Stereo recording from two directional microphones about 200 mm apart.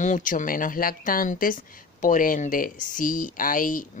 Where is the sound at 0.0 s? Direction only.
40° left (ahead or behind).